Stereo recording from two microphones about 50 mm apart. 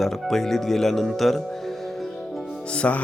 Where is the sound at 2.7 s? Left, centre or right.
Left.